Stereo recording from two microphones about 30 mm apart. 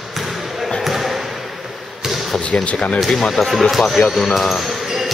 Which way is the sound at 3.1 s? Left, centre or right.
Centre.